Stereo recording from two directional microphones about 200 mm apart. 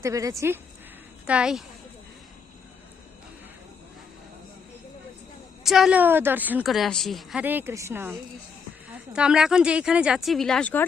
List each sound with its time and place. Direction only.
0.0 s a woman's voice: 15° right (ahead or behind)
5.6 s a woman's voice: centre (ahead or behind)